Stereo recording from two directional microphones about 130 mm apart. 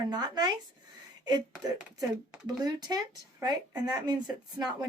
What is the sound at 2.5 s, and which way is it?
A woman's voice, 30° right (ahead or behind).